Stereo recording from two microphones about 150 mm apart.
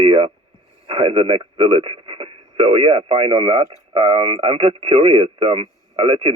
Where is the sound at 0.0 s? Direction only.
40° right (ahead or behind).